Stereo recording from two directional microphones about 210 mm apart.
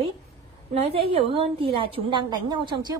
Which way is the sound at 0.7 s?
30° right (ahead or behind).